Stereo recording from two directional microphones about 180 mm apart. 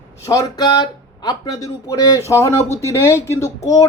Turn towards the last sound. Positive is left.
turn(degrees=20)  # may be behind; listen again after turning